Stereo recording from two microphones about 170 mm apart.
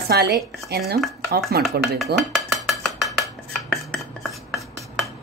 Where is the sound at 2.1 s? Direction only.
Centre (ahead or behind).